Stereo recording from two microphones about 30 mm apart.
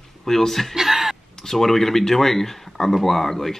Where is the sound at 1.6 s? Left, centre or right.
Centre.